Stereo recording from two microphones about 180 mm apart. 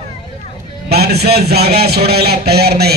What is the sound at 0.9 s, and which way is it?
A man's voice, 65° right (ahead or behind).